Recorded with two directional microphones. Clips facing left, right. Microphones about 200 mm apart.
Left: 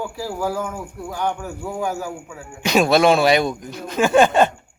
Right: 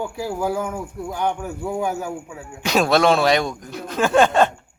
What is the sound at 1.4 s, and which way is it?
Speech, centre (ahead or behind).